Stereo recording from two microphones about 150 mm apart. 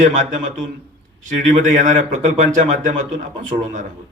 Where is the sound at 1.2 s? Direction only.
55° right (ahead or behind).